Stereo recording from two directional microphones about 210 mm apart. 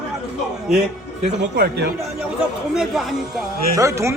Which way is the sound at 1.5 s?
45° right (ahead or behind).